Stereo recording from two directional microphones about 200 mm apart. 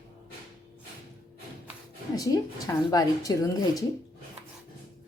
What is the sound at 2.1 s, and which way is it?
A woman's voice, 15° left (ahead or behind).